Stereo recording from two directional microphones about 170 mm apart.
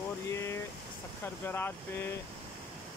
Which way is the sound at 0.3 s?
15° left (ahead or behind).